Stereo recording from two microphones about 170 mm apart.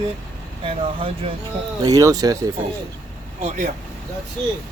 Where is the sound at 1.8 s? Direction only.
20° right (ahead or behind).